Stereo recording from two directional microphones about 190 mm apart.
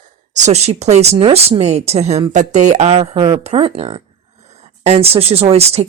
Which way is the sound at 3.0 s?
20° right (ahead or behind).